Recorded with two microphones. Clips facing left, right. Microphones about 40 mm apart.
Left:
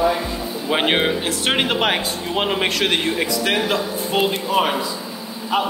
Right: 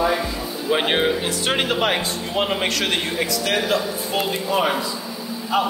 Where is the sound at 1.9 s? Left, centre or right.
Centre.